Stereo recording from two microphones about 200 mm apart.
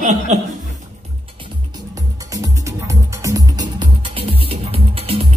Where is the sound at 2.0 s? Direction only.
15° right (ahead or behind).